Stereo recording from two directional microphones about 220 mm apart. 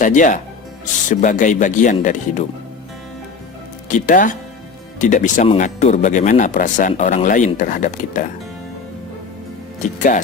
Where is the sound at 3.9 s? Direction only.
35° left (ahead or behind).